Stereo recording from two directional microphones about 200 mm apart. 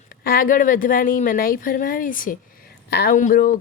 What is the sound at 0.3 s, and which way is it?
A woman's voice, 45° left (ahead or behind).